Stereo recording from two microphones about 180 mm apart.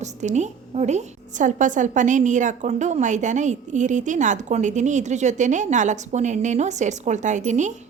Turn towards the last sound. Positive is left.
turn(degrees=-40)  # may be behind; listen again after turning